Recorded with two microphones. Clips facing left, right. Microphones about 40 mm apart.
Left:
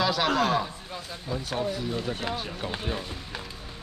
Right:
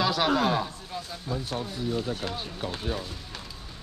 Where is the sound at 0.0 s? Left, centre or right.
Centre.